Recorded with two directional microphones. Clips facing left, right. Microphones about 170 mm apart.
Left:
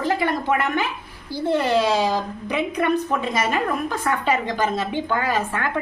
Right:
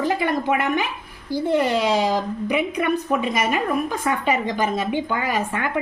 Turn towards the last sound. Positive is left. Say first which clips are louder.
# even
turn(degrees=-15)  # may be behind; listen again after turning